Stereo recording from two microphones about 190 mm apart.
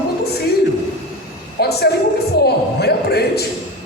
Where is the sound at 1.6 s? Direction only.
55° left (ahead or behind).